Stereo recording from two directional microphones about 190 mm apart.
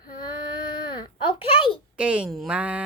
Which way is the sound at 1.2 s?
25° left (ahead or behind).